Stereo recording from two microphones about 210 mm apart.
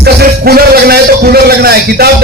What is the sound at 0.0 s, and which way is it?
A man's voice, 50° right (ahead or behind).